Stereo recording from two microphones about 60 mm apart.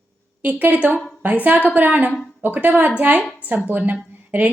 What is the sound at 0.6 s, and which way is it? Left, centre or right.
A woman's voice, right.